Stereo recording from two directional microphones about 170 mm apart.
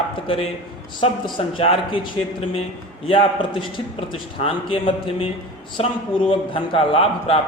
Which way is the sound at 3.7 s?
30° left (ahead or behind).